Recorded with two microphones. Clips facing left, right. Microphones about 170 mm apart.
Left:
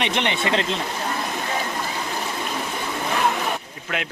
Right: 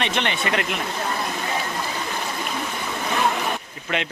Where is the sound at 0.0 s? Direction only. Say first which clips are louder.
Left 1 dB; 20° left (ahead or behind).